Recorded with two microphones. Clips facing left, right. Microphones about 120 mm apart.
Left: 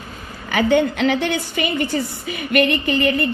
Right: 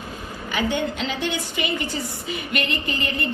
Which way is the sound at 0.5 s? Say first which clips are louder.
Left 8 dB; 55° left (ahead or behind).